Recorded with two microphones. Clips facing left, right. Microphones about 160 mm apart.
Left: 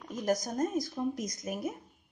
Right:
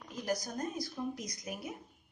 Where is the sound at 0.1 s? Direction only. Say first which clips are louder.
Left 5 dB; 45° left (ahead or behind).